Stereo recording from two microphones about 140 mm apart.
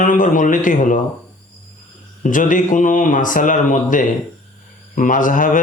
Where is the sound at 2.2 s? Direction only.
70° left (ahead or behind).